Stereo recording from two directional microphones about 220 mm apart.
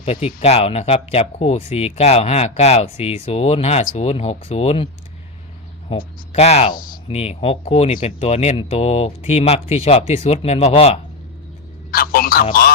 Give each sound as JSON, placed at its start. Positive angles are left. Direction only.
{"t": 0.0, "sound": "speech", "side_deg": 25}
{"t": 6.0, "sound": "speech", "side_deg": 30}
{"t": 11.9, "sound": "speech", "side_deg": 40}